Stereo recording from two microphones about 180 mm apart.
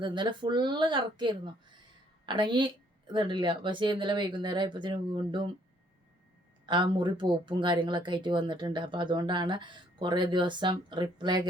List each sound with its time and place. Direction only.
0.0 s speech: 25° right (ahead or behind)
6.7 s speech: 25° right (ahead or behind)